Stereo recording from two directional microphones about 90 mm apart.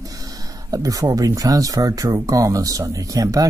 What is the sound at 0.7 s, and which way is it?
Speech, 40° right (ahead or behind).